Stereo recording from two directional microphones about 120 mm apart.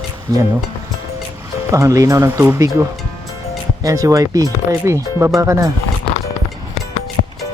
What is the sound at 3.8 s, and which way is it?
Speech, 30° right (ahead or behind).